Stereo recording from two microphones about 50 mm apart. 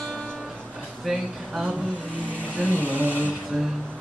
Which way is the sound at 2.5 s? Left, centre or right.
Right.